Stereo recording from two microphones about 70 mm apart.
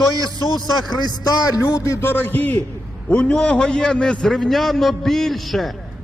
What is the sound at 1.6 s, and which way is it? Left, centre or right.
Speech, left.